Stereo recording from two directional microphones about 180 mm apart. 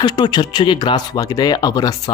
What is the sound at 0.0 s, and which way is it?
Speech, 25° left (ahead or behind).